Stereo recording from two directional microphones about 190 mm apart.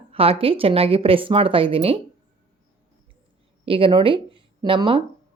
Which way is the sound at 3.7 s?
30° right (ahead or behind).